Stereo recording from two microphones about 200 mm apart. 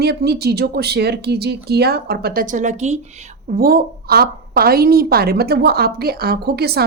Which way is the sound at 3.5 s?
45° right (ahead or behind).